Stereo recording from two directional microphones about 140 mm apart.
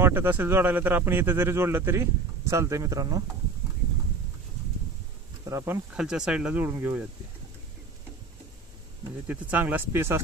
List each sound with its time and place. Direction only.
0.0 s speech: 15° right (ahead or behind)
5.4 s speech: 25° right (ahead or behind)
5.9 s speech: 5° right (ahead or behind)
9.3 s speech: 10° right (ahead or behind)